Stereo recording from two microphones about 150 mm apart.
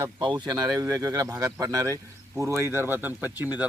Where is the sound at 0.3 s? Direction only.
25° right (ahead or behind).